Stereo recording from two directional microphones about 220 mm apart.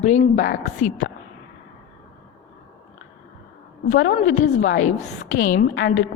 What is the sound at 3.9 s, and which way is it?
Speech, 55° left (ahead or behind).